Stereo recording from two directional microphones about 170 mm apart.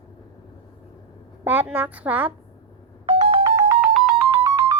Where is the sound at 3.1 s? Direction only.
35° right (ahead or behind).